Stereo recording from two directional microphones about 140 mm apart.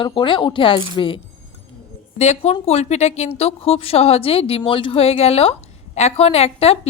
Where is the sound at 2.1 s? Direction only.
50° left (ahead or behind).